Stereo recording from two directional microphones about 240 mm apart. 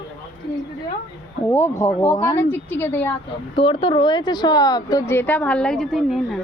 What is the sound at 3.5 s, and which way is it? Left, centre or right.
Speech, left.